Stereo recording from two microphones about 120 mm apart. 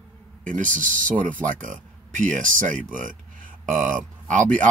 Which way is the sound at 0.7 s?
90° right.